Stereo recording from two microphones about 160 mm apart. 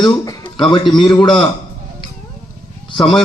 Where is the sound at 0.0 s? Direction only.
25° left (ahead or behind).